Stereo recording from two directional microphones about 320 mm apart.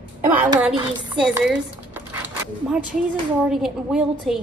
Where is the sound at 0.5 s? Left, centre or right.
Centre.